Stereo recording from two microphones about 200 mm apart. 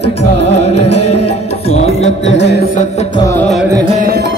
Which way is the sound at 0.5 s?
30° left (ahead or behind).